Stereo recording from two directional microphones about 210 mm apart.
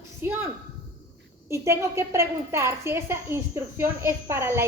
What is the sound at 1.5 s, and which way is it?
A woman's voice, 15° right (ahead or behind).